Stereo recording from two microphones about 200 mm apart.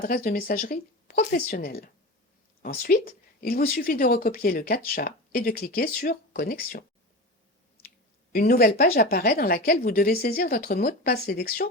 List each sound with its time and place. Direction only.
0.0 s speech: 45° left (ahead or behind)
8.3 s speech: 50° left (ahead or behind)